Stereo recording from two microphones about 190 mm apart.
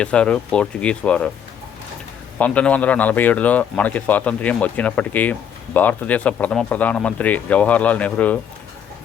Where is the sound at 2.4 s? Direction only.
5° left (ahead or behind).